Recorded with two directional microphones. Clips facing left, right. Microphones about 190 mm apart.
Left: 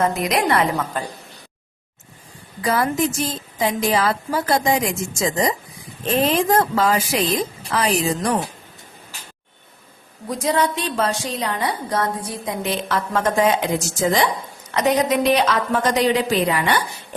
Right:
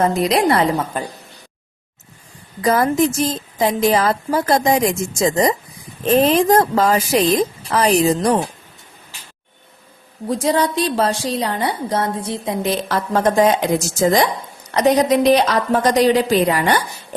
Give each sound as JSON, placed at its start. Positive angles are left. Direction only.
{"t": 0.0, "sound": "a woman's voice", "side_deg": -30}
{"t": 2.6, "sound": "a woman's voice", "side_deg": -40}
{"t": 6.1, "sound": "a woman's voice", "side_deg": -45}
{"t": 10.2, "sound": "a woman's voice", "side_deg": -30}